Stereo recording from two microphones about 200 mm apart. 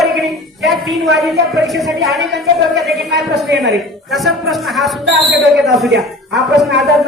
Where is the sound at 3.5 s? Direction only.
60° right (ahead or behind).